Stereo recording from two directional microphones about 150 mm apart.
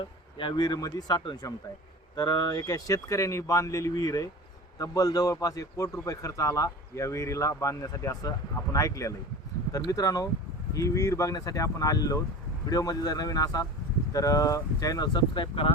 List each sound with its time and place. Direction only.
0.0 s a man's voice: 35° left (ahead or behind)